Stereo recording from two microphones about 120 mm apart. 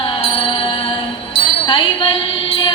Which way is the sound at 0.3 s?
50° left (ahead or behind).